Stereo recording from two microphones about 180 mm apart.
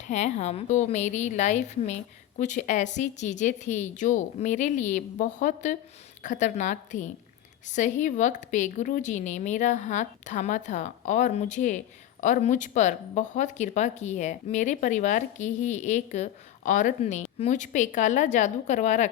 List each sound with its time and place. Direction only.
0.1 s speech: 40° left (ahead or behind)